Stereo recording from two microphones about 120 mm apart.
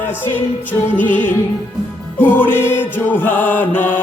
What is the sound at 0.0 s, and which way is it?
Music, 20° left (ahead or behind).